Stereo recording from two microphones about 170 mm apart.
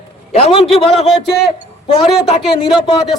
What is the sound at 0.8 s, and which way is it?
Speech, 30° left (ahead or behind).